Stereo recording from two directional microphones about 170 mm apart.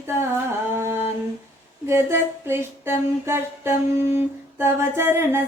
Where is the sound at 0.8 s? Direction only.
15° right (ahead or behind).